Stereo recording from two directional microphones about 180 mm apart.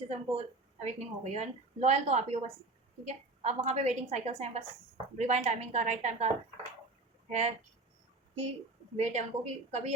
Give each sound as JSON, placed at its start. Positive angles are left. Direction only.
{"t": 0.1, "sound": "a woman's voice", "side_deg": -35}
{"t": 9.0, "sound": "a woman's voice", "side_deg": -40}